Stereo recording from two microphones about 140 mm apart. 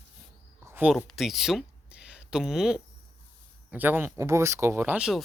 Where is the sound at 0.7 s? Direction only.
15° right (ahead or behind).